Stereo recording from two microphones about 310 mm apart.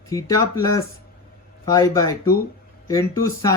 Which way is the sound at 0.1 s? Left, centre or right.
Centre.